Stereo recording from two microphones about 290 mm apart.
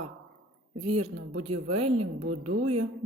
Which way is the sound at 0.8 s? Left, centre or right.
Right.